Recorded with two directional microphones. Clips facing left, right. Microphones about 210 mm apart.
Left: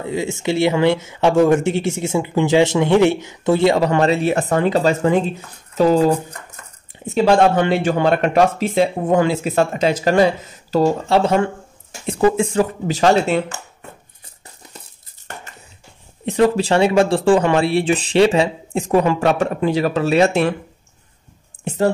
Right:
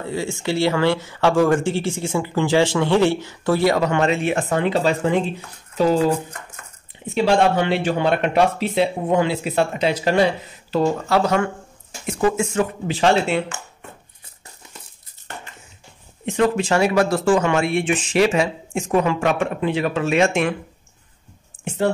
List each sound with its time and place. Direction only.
0.0 s speech: 20° left (ahead or behind); by 6.1 s 40° left (ahead or behind)
7.2 s speech: 45° left (ahead or behind)
11.1 s speech: 25° left (ahead or behind)
16.3 s speech: 35° left (ahead or behind)